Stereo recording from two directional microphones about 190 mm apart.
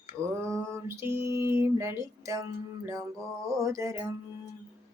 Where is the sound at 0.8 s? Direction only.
15° right (ahead or behind).